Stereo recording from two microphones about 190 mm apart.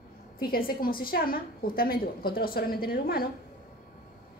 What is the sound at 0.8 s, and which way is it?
A woman's voice, 50° left (ahead or behind).